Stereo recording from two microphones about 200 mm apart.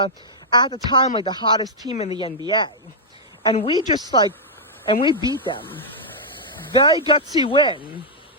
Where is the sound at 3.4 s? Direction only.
25° left (ahead or behind).